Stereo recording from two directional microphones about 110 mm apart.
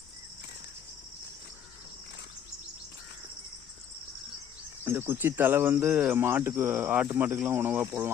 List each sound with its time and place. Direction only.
4.9 s speech: 20° right (ahead or behind)